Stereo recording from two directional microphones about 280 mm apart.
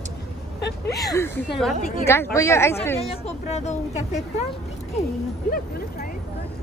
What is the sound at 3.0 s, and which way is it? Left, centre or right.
Speech, left.